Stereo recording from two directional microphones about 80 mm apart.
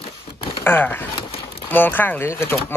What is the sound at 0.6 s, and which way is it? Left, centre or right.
Speech, left.